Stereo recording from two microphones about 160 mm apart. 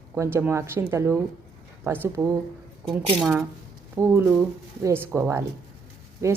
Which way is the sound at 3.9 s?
15° right (ahead or behind).